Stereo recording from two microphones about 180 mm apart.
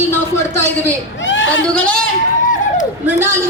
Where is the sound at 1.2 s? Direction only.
90° left.